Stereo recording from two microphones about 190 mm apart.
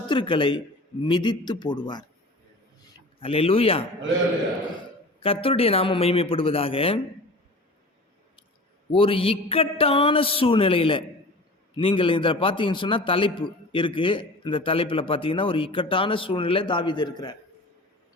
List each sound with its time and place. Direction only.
0.1 s a man's voice: 25° left (ahead or behind)
3.2 s a man's voice: 30° left (ahead or behind)
5.2 s a man's voice: 30° left (ahead or behind)
8.9 s a man's voice: 30° left (ahead or behind)